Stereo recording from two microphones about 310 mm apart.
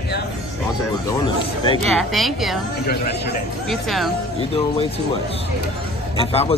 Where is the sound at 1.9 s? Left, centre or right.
Centre.